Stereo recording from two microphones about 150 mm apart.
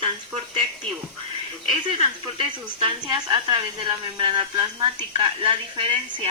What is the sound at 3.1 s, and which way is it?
A woman's voice, 30° right (ahead or behind).